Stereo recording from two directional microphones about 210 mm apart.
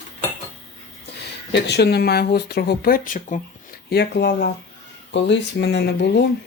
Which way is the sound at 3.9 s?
50° left (ahead or behind).